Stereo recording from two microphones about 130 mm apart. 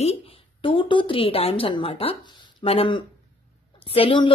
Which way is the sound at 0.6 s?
40° left (ahead or behind).